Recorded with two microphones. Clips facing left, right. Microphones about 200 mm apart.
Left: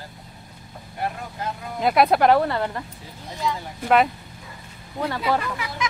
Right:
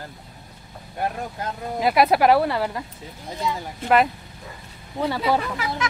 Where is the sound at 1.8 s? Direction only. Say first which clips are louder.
Even; 5° right (ahead or behind).